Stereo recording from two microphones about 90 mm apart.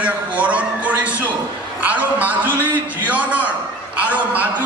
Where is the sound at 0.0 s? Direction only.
15° right (ahead or behind).